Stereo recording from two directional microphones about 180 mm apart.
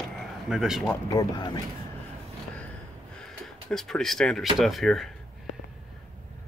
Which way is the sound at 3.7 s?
Centre (ahead or behind).